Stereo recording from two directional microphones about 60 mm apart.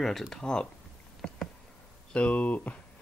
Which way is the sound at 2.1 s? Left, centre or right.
Left.